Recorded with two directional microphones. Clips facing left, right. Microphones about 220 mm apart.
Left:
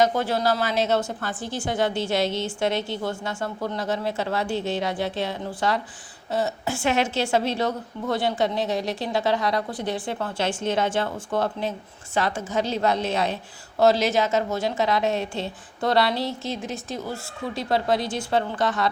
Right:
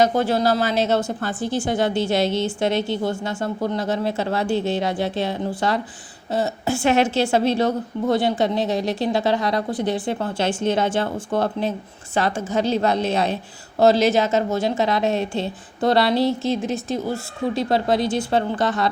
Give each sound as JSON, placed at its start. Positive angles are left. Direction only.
{"t": 0.0, "sound": "a woman's voice", "side_deg": -25}